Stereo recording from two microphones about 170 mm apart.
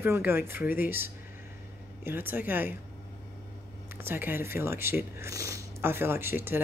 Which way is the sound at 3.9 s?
10° right (ahead or behind).